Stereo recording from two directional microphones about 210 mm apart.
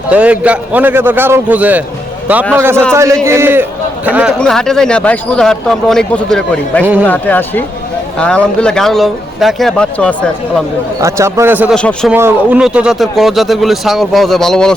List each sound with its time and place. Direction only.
0.1 s a man's voice: 5° right (ahead or behind)
11.0 s a man's voice: 15° right (ahead or behind)
11.7 s speech: 5° left (ahead or behind)
12.1 s speech: 10° right (ahead or behind)